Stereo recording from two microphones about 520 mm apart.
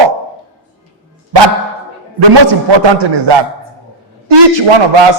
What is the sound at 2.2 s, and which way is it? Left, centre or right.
A man's voice, right.